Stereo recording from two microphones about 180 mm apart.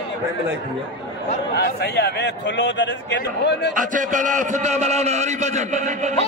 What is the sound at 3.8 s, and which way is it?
A man's voice, 45° right (ahead or behind).